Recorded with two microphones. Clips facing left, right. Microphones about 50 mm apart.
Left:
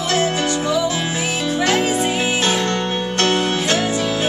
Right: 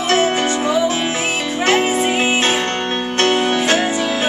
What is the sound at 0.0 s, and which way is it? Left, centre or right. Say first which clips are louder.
Music: right 3 dB; right.